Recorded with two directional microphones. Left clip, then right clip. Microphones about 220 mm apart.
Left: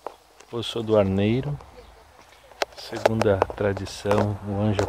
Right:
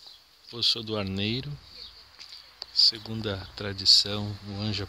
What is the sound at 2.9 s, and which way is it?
Speech, 30° right (ahead or behind).